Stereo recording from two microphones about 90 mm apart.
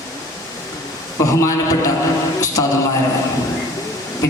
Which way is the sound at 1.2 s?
35° left (ahead or behind).